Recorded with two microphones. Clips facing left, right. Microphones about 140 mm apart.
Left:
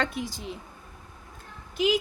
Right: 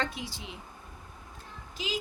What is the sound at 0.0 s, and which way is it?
Speech, 50° left (ahead or behind).